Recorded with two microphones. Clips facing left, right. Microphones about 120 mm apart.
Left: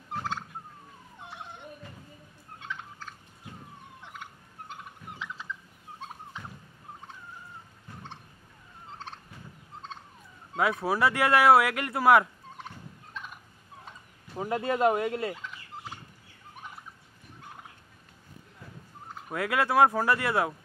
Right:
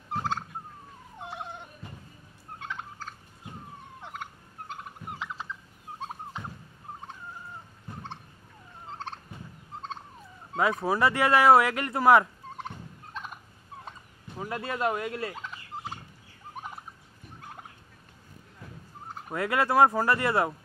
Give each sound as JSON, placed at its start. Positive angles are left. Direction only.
{"t": 0.1, "sound": "a sound", "side_deg": -40}
{"t": 2.7, "sound": "turkey", "side_deg": -45}
{"t": 5.2, "sound": "fowl", "side_deg": -40}
{"t": 10.6, "sound": "speech", "side_deg": 5}
{"t": 12.5, "sound": "fowl", "side_deg": -35}
{"t": 14.3, "sound": "a sound", "side_deg": 20}
{"t": 14.7, "sound": "speech", "side_deg": 20}
{"t": 19.3, "sound": "speech", "side_deg": 0}